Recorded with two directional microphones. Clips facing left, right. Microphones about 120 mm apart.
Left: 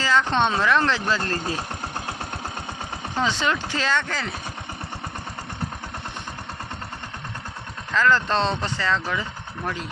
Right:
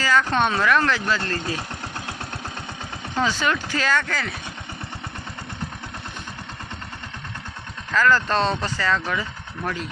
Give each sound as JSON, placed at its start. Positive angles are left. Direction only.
{"t": 0.0, "sound": "speech", "side_deg": 25}
{"t": 3.2, "sound": "speech", "side_deg": 25}
{"t": 7.9, "sound": "speech", "side_deg": 20}